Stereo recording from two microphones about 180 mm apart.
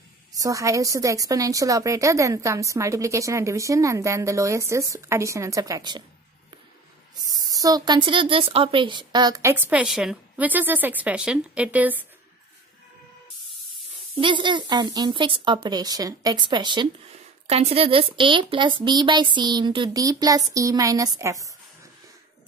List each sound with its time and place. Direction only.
0.3 s a woman's voice: 20° right (ahead or behind)
7.5 s a woman's voice: 20° right (ahead or behind)
14.1 s a woman's voice: 25° right (ahead or behind)